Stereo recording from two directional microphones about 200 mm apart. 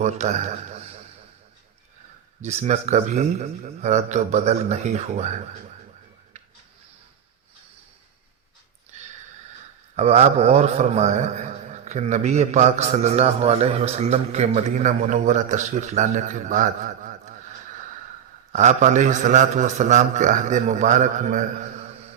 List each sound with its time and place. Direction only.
0.0 s a man's voice: 35° right (ahead or behind)
2.4 s a man's voice: 35° right (ahead or behind)
9.9 s a man's voice: 35° right (ahead or behind)
18.5 s a man's voice: 35° right (ahead or behind)